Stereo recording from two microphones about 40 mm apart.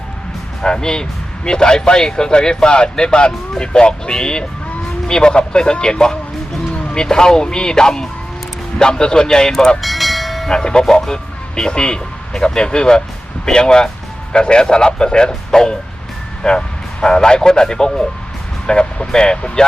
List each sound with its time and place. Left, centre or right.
0.6 s speech: centre
9.8 s train: centre
10.5 s speech: centre